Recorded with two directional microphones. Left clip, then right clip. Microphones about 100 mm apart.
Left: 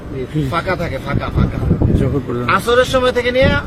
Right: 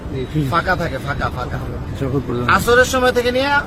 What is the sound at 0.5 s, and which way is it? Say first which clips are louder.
Speech: right 2 dB; 40° right (ahead or behind).